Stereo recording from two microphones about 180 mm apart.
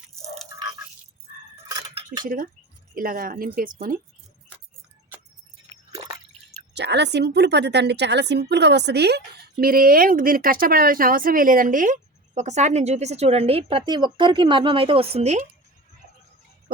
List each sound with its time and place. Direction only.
2.2 s a woman's voice: 50° right (ahead or behind)
6.7 s a woman's voice: 70° right (ahead or behind); by 15.4 s 40° right (ahead or behind)